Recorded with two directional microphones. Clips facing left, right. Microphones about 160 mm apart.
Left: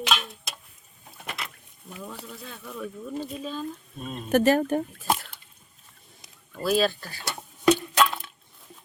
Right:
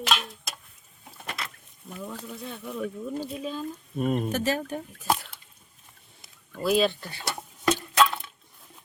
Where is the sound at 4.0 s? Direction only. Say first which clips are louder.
Right 11 dB; 60° right (ahead or behind).